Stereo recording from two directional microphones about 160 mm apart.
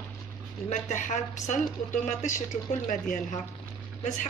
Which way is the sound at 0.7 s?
50° left (ahead or behind).